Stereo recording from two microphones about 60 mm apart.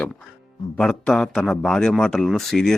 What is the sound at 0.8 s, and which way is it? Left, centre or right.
Speech, centre.